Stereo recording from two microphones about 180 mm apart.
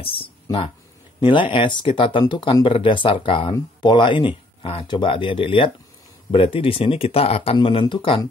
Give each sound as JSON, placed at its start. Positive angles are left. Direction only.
{"t": 0.0, "sound": "speech", "side_deg": 30}